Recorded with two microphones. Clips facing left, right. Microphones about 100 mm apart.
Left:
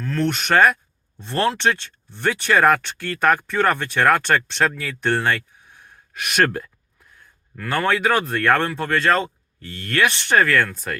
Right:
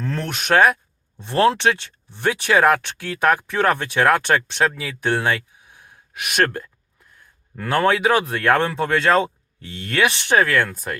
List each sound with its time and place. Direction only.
0.2 s speech: 10° right (ahead or behind)
6.3 s speech: 5° left (ahead or behind)
7.7 s speech: 15° right (ahead or behind)